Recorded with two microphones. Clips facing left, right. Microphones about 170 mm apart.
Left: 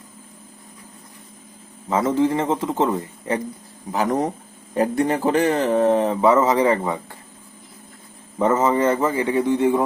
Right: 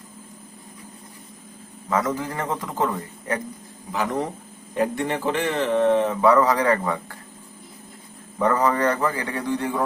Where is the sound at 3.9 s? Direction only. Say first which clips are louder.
Left 4 dB; 40° left (ahead or behind); by 7.1 s 20° left (ahead or behind).